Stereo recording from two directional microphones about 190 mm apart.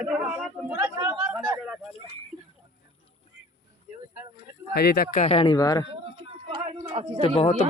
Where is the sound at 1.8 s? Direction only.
30° left (ahead or behind).